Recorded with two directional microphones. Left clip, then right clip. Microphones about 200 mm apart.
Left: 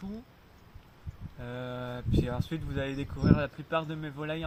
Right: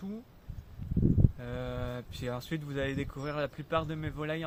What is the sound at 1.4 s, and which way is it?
Speech, 25° right (ahead or behind).